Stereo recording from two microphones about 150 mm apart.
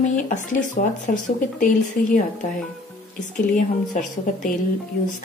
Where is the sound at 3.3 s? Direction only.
60° left (ahead or behind).